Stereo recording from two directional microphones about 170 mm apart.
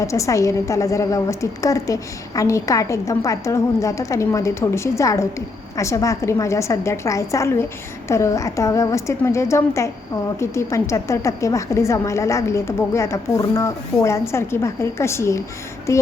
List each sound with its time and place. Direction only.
0.0 s a woman's voice: 20° left (ahead or behind)